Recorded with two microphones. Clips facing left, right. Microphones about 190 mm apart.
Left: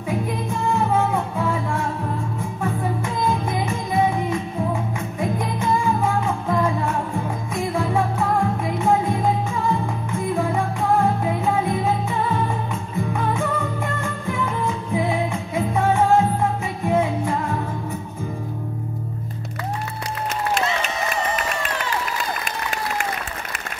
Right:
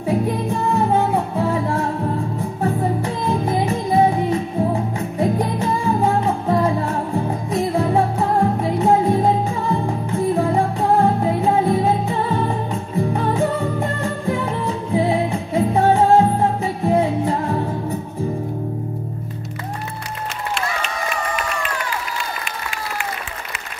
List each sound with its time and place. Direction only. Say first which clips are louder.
0.0 s music: right 5 dB; 35° right (ahead or behind)